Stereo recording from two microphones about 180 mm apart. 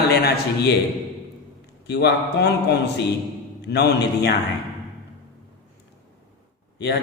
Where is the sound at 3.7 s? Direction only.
65° left (ahead or behind).